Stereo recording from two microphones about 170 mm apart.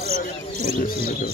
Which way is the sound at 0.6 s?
55° left (ahead or behind).